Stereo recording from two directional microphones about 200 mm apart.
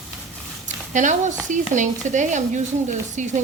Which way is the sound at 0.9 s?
40° right (ahead or behind).